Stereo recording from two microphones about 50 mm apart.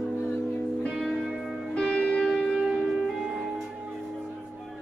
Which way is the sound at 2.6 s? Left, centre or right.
Centre.